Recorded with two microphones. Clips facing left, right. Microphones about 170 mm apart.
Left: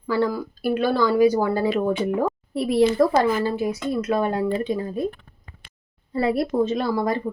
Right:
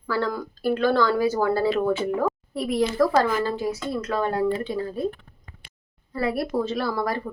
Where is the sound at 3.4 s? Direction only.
10° left (ahead or behind).